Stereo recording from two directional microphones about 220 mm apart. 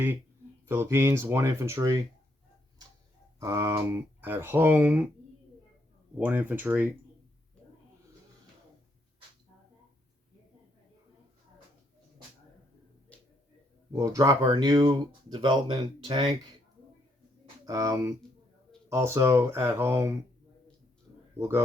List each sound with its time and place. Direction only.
0.7 s speech: 10° right (ahead or behind)
3.4 s speech: 15° right (ahead or behind)
6.1 s speech: 5° right (ahead or behind)
13.1 s a sound: 5° left (ahead or behind)
13.9 s speech: 15° right (ahead or behind)
17.7 s speech: 15° right (ahead or behind)
21.3 s speech: 10° right (ahead or behind)